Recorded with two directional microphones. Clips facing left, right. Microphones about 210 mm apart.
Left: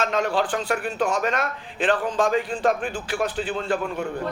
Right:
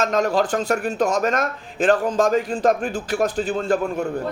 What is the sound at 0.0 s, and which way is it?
A man's voice, 40° right (ahead or behind).